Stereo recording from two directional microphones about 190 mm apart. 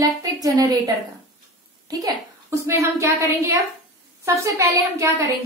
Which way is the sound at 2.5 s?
15° right (ahead or behind).